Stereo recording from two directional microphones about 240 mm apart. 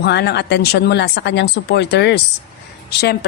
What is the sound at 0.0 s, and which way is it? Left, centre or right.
A woman's voice, left.